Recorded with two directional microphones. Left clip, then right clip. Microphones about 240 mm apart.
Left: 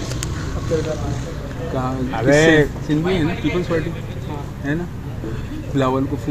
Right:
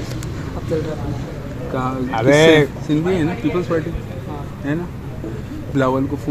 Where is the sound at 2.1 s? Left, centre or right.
Right.